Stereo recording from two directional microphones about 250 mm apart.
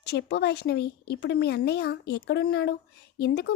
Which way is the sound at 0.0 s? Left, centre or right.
Left.